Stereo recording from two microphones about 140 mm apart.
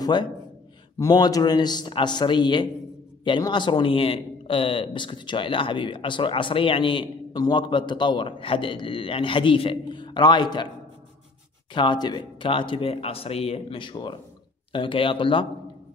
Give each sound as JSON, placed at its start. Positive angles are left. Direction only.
{"t": 0.0, "sound": "a man's voice", "side_deg": 35}
{"t": 11.7, "sound": "a man's voice", "side_deg": 35}